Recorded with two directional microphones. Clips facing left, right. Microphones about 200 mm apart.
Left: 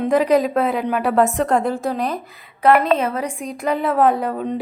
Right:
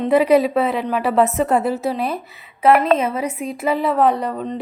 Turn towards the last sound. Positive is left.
turn(degrees=5)  # may be behind; listen again after turning